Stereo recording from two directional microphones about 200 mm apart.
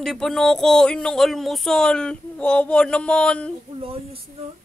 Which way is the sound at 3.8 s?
30° right (ahead or behind).